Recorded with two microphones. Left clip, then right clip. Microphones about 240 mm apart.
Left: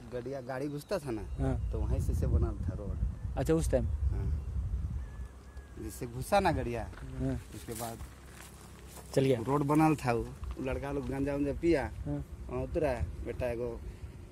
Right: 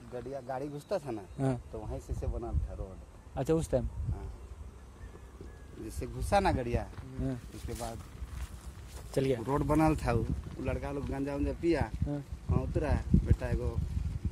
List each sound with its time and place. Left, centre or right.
0.1 s speech: left
3.3 s speech: centre
5.9 s speech: centre
9.1 s speech: centre